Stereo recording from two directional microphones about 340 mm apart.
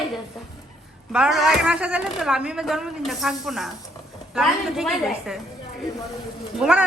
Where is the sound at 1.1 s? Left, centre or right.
Centre.